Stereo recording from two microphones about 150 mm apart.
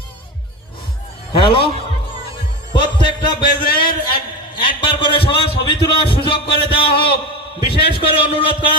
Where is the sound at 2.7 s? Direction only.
30° left (ahead or behind).